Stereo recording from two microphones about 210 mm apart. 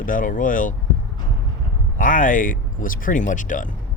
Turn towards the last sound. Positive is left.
turn(degrees=40)  # may be behind; listen again after turning